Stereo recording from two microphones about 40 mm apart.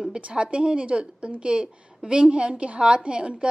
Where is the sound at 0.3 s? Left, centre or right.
Right.